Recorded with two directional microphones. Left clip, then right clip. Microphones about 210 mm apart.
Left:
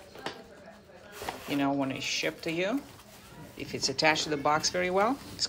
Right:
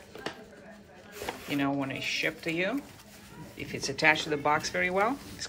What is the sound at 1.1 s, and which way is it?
Speech, 15° left (ahead or behind).